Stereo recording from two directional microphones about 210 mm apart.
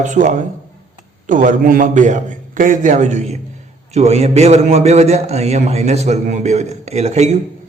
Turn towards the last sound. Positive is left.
turn(degrees=-30)  # may be behind; listen again after turning